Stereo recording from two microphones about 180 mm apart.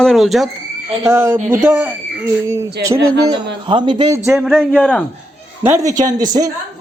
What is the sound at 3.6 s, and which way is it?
Speech, 25° right (ahead or behind).